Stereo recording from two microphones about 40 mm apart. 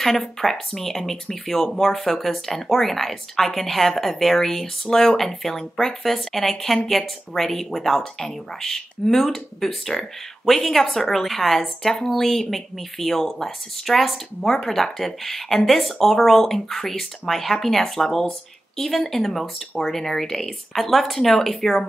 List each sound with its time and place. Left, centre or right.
0.0 s speech: centre